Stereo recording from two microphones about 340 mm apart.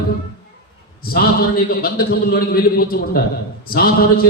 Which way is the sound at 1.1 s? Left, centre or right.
Left.